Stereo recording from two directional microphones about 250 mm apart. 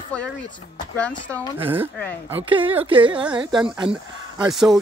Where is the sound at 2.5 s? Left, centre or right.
Right.